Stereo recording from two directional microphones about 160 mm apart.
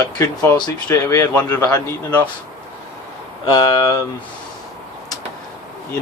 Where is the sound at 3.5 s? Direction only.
25° left (ahead or behind).